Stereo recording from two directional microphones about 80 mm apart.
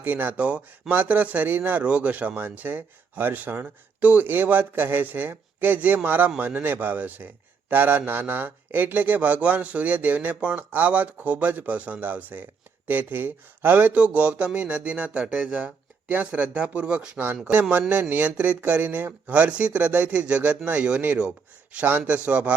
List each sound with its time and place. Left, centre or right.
0.0 s speech: right